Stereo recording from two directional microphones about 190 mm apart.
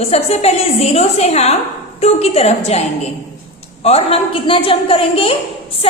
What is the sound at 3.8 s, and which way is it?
A woman's voice, 30° left (ahead or behind).